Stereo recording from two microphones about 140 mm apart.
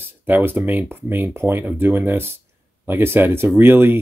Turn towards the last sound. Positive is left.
turn(degrees=-15)  # may be behind; listen again after turning